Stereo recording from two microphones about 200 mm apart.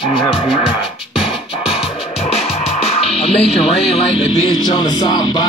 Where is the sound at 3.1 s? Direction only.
30° left (ahead or behind).